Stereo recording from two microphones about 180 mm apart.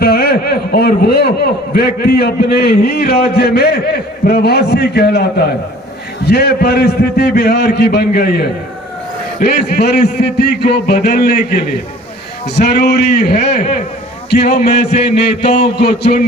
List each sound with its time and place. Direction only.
0.0 s a man's voice: 60° left (ahead or behind)